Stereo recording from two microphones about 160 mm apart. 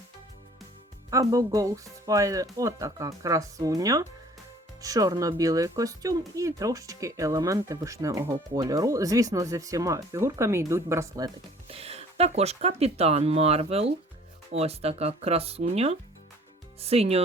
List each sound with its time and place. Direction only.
1.1 s speech: 20° right (ahead or behind)
11.7 s speech: 40° right (ahead or behind)